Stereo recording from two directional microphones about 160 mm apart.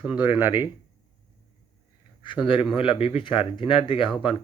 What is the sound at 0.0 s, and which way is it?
Speech, 10° right (ahead or behind).